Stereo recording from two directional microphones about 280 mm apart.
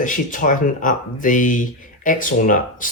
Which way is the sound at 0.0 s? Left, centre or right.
Left.